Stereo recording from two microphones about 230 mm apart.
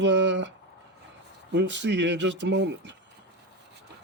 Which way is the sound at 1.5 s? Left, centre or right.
Right.